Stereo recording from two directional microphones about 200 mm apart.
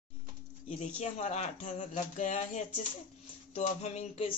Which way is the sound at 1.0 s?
35° left (ahead or behind).